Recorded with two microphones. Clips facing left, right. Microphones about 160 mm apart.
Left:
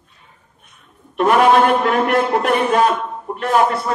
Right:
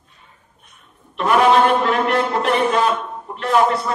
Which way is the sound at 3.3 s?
50° left (ahead or behind).